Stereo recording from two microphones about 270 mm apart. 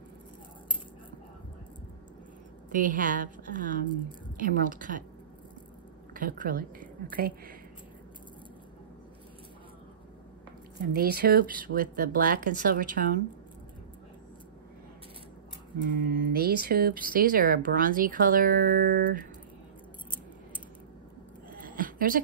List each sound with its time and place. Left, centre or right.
2.7 s a woman's voice: right
6.1 s speech: right
10.8 s speech: right
15.7 s speech: right
21.6 s a sound: right